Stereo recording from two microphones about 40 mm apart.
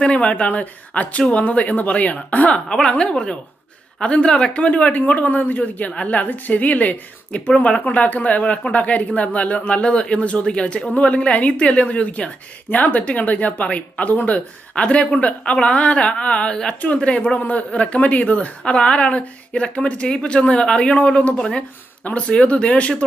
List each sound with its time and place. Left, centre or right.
0.0 s speech: left
2.6 s a woman's voice: centre
4.6 s speech: left
12.7 s speech: left
17.4 s speech: left